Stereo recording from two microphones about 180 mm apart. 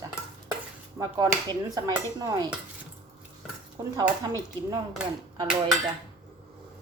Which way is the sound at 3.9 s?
20° right (ahead or behind).